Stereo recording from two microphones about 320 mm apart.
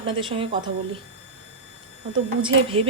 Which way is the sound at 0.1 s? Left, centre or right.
Centre.